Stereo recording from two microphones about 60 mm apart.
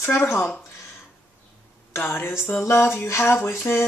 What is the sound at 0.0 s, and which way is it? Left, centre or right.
Music, left.